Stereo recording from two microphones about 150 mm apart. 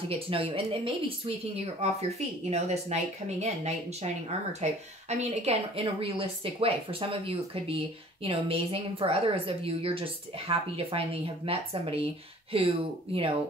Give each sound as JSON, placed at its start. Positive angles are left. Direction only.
{"t": 0.3, "sound": "a woman's voice", "side_deg": -40}